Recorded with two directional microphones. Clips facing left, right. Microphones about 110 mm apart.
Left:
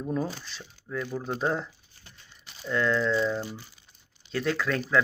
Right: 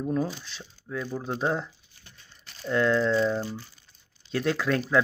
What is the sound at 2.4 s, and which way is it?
Crumpling, 10° left (ahead or behind).